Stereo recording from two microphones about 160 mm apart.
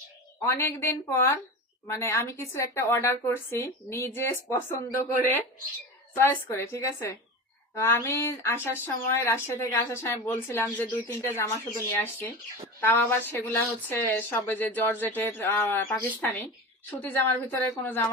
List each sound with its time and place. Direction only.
0.4 s speech: 15° left (ahead or behind)